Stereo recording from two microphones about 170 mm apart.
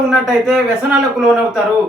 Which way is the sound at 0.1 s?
Centre (ahead or behind).